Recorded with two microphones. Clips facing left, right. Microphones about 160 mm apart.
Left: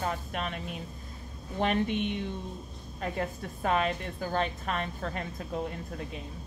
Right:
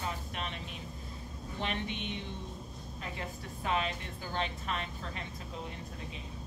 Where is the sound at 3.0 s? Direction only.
50° left (ahead or behind).